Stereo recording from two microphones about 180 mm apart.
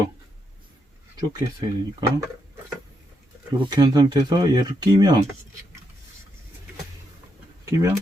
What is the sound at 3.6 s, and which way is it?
Speech, 20° right (ahead or behind).